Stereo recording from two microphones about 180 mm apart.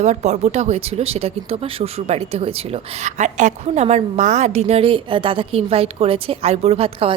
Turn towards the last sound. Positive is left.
turn(degrees=-30)  # may be behind; listen again after turning